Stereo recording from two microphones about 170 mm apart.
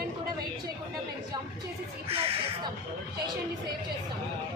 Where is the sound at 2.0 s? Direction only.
35° right (ahead or behind).